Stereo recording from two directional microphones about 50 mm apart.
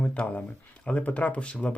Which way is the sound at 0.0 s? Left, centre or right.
Left.